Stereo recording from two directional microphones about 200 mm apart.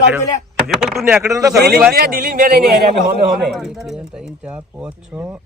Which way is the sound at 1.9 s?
50° right (ahead or behind).